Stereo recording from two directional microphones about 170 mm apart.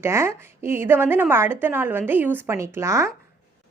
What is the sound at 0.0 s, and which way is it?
A woman's voice, 15° right (ahead or behind).